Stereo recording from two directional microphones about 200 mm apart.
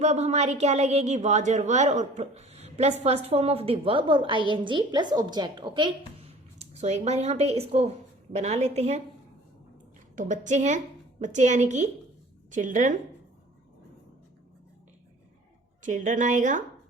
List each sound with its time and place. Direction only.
0.0 s a woman's voice: 35° right (ahead or behind)
6.7 s a woman's voice: 35° right (ahead or behind)
10.2 s a woman's voice: 40° right (ahead or behind)
15.8 s a woman's voice: 40° right (ahead or behind)